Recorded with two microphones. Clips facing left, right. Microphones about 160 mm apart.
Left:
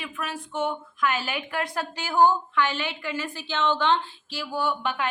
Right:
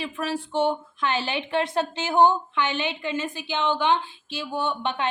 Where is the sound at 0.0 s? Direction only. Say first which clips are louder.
Right 5 dB; 30° right (ahead or behind).